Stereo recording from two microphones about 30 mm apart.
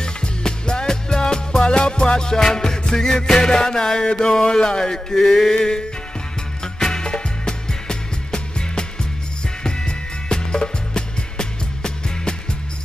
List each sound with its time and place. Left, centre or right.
0.0 s music: left
3.3 s a sound: left
6.6 s music: left